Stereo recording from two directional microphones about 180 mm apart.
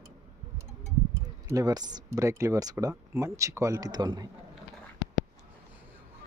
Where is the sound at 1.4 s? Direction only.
20° right (ahead or behind).